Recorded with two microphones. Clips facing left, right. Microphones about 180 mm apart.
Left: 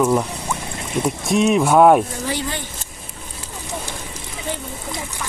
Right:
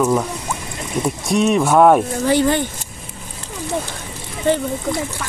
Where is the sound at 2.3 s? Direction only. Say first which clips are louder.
Right 10 dB; 55° right (ahead or behind).